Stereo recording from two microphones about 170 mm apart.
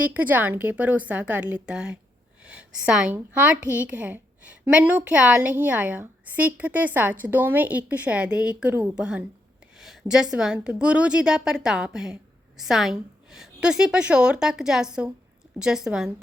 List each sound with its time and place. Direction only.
0.1 s a woman's voice: 10° right (ahead or behind)
9.7 s a sound: centre (ahead or behind)
10.3 s a woman's voice: 5° right (ahead or behind)